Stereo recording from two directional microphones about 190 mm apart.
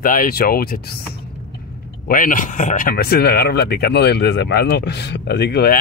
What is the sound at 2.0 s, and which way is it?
Speech, 45° left (ahead or behind).